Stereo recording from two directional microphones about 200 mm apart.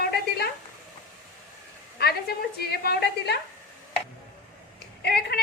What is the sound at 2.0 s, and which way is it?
A woman's voice, 55° left (ahead or behind).